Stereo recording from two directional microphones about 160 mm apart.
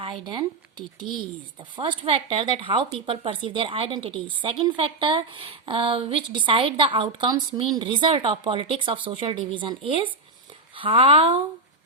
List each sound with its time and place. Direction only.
0.0 s speech: 30° right (ahead or behind)
1.7 s a woman's voice: 35° right (ahead or behind)